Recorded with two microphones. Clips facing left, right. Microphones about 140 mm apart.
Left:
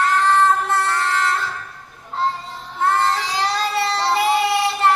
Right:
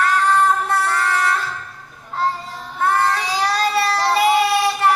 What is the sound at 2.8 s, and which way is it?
Child singing, 20° left (ahead or behind).